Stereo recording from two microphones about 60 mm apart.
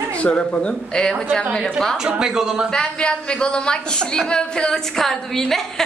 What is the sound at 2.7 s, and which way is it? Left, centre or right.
A woman's voice, centre.